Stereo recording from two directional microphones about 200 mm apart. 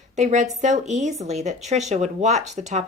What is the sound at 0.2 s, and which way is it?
Speech, 35° right (ahead or behind).